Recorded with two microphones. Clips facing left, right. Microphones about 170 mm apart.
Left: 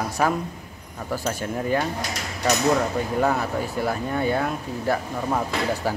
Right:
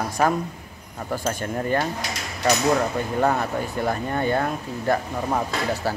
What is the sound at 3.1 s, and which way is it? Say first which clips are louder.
A man's voice: right 1 dB; 5° left (ahead or behind).